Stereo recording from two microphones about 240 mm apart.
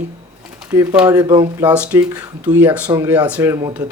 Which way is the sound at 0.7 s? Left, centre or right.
Centre.